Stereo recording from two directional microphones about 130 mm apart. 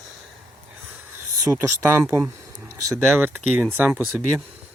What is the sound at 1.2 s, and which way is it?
Speech, 20° right (ahead or behind).